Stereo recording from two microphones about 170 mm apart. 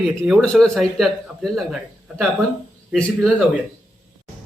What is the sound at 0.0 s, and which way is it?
Speech, centre (ahead or behind).